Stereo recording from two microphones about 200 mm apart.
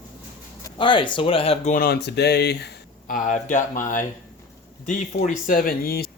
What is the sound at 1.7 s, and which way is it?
Speech, 50° left (ahead or behind).